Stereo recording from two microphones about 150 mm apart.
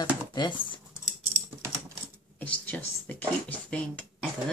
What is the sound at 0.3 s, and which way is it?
Speech, 30° left (ahead or behind).